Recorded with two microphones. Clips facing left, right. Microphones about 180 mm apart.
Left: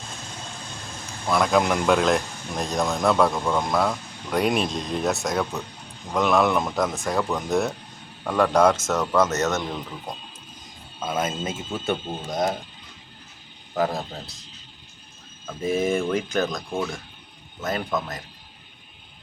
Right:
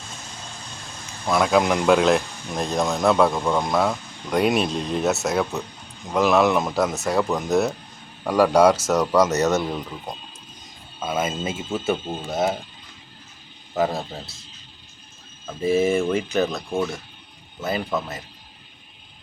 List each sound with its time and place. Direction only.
1.3 s speech: 5° right (ahead or behind)
4.7 s speech: 35° right (ahead or behind)
5.0 s speech: 5° right (ahead or behind)
11.0 s speech: 5° right (ahead or behind)
13.7 s speech: 5° right (ahead or behind)
15.4 s speech: 5° right (ahead or behind)